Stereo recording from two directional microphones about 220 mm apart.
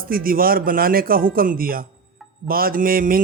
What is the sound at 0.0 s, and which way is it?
Speech, 40° right (ahead or behind).